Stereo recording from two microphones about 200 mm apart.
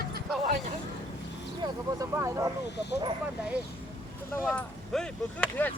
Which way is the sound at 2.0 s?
15° right (ahead or behind).